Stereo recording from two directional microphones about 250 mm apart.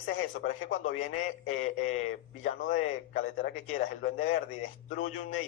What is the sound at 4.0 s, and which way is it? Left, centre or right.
A man's voice, left.